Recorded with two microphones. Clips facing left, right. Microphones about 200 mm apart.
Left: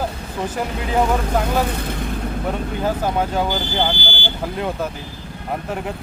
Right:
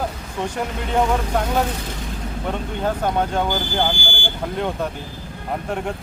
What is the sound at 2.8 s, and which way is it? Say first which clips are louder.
Speech: even; 5° left (ahead or behind).